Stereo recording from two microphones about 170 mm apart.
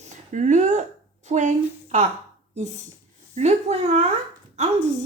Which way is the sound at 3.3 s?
40° right (ahead or behind).